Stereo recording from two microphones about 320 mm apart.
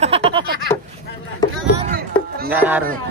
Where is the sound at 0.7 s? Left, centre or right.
Centre.